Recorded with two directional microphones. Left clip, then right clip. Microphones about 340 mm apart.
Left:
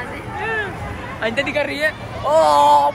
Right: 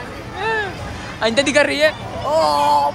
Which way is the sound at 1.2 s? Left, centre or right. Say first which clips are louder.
Right 5 dB; centre.